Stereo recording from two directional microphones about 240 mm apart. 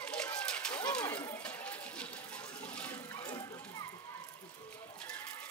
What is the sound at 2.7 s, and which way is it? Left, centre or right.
Water, centre.